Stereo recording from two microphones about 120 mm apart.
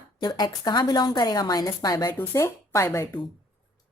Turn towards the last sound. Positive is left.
turn(degrees=20)  # may be behind; listen again after turning